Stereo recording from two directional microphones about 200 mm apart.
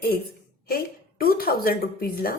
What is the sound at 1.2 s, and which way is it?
Speech, 50° left (ahead or behind).